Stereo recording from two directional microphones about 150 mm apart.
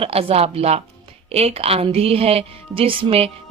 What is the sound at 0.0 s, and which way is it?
Speech, 40° right (ahead or behind).